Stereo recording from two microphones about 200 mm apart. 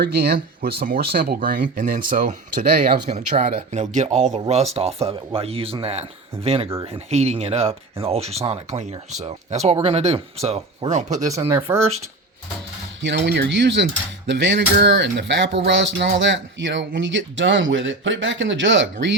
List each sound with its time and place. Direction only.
0.0 s speech: 55° right (ahead or behind); by 11.4 s 35° right (ahead or behind)
11.4 s speech: 15° right (ahead or behind)
13.0 s speech: 60° right (ahead or behind)